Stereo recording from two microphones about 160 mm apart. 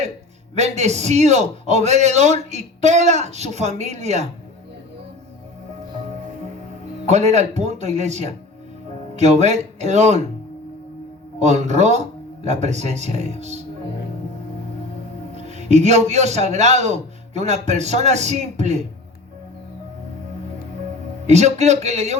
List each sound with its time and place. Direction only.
0.5 s a man's voice: 45° right (ahead or behind)
7.1 s a man's voice: 45° right (ahead or behind)
11.3 s a man's voice: 45° right (ahead or behind)
15.4 s a man's voice: 45° right (ahead or behind)
21.2 s a man's voice: 45° right (ahead or behind)